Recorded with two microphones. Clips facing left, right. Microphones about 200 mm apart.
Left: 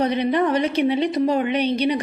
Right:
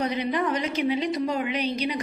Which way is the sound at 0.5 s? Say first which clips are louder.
Left 6 dB; 60° left (ahead or behind).